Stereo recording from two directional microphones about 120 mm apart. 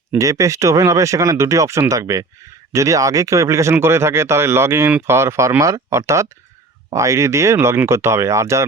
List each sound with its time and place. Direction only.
0.2 s speech: 25° right (ahead or behind)